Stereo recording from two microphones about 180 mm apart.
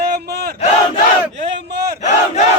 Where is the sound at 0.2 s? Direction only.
65° right (ahead or behind).